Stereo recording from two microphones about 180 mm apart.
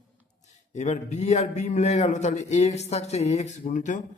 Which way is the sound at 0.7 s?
40° left (ahead or behind).